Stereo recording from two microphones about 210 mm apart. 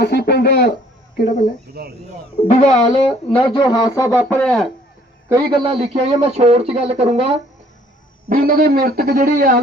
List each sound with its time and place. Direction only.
0.0 s a sound: 50° left (ahead or behind)
1.1 s speech: 45° left (ahead or behind)
1.7 s a man's voice: 50° right (ahead or behind)
2.5 s a man's voice: 35° left (ahead or behind); by 4.6 s 5° left (ahead or behind)
5.3 s speech: 20° right (ahead or behind)
8.3 s a man's voice: 40° right (ahead or behind)